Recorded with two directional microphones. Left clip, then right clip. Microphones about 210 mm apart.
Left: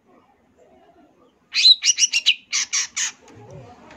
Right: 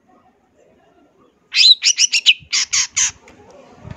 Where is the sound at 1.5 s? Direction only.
25° right (ahead or behind).